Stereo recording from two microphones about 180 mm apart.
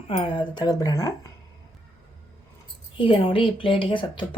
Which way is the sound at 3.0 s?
30° left (ahead or behind).